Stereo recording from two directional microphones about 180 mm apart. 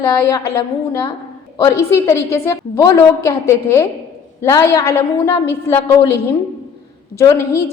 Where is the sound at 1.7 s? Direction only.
15° left (ahead or behind).